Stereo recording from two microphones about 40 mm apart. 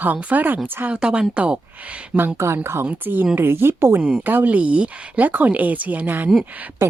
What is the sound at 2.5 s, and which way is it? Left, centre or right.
Speech, right.